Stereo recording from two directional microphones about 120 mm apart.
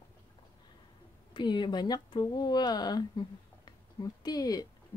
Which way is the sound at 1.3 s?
40° left (ahead or behind).